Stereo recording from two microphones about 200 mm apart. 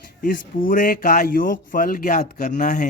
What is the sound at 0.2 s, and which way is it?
Speech, 45° left (ahead or behind).